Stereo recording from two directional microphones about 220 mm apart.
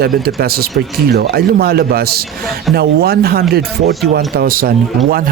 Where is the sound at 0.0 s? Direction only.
45° right (ahead or behind).